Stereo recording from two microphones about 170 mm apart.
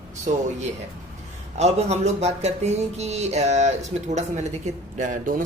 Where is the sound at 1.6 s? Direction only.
40° right (ahead or behind).